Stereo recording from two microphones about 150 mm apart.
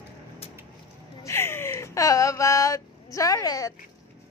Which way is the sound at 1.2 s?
15° left (ahead or behind).